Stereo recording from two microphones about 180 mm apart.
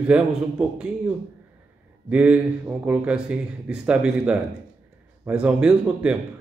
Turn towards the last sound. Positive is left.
turn(degrees=-5)  # may be behind; listen again after turning